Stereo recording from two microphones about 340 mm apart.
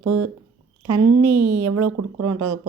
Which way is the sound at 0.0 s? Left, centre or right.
Right.